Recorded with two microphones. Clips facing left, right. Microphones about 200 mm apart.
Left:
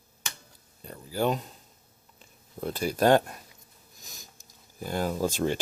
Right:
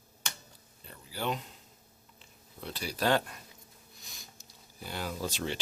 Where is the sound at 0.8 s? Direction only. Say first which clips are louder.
Left 9 dB; 45° left (ahead or behind).